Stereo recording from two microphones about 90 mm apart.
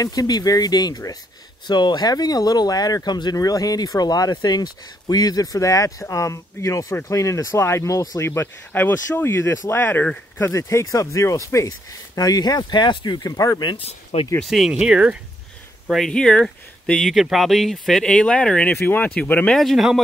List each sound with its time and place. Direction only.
0.0 s speech: 45° left (ahead or behind)
8.2 s speech: 30° left (ahead or behind); by 13.7 s 50° left (ahead or behind)
14.4 s speech: centre (ahead or behind)
16.1 s speech: 10° left (ahead or behind)
19.5 s speech: centre (ahead or behind)